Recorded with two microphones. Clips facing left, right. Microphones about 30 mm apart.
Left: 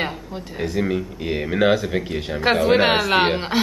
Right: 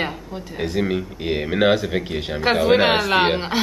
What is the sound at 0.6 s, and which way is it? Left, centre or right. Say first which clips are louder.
A woman's voice: even; centre.